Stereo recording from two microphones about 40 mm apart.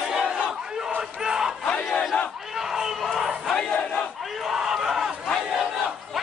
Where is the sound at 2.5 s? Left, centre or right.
Centre.